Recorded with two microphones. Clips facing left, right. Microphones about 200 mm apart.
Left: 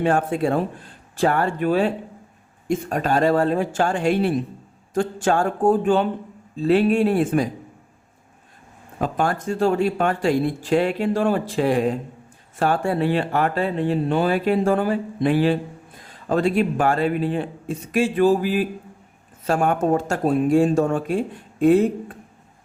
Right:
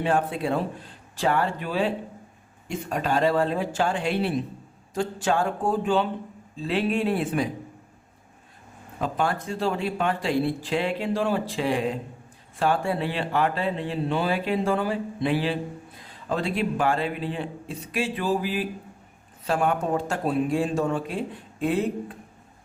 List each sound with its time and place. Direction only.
0.0 s speech: 50° left (ahead or behind)
9.0 s speech: 45° left (ahead or behind)